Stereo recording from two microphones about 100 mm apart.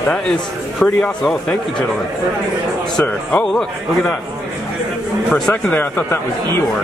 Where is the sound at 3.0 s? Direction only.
10° left (ahead or behind).